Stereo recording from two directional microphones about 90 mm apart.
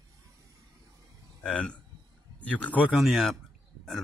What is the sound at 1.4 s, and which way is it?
Speech, 15° left (ahead or behind).